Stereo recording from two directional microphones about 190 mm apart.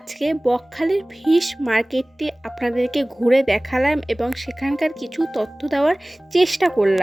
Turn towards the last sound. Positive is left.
turn(degrees=0)  # may be behind; listen again after turning